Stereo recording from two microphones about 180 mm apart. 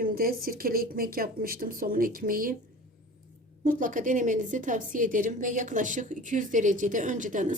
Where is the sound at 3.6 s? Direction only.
45° right (ahead or behind).